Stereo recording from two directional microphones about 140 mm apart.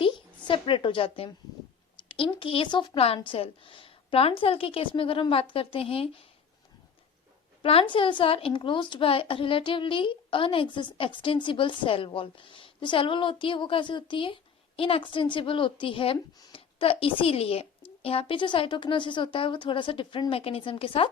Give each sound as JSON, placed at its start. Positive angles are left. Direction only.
{"t": 0.0, "sound": "a sound", "side_deg": 40}
{"t": 2.0, "sound": "a woman's voice", "side_deg": 40}
{"t": 7.6, "sound": "a woman's voice", "side_deg": 40}